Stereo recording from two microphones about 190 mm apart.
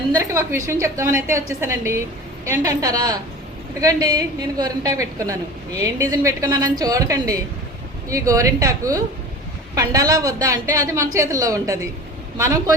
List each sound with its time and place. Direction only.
0.2 s a woman's voice: 15° right (ahead or behind)